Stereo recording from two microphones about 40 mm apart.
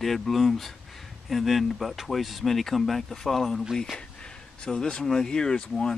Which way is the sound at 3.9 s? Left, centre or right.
Left.